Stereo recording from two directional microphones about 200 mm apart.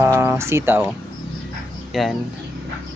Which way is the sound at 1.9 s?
Centre (ahead or behind).